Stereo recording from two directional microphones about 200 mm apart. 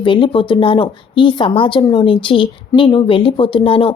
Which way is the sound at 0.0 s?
25° left (ahead or behind).